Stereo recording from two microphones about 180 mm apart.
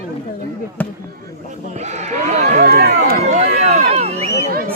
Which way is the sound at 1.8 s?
40° right (ahead or behind).